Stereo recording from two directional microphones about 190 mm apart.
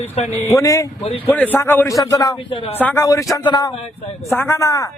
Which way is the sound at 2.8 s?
10° left (ahead or behind).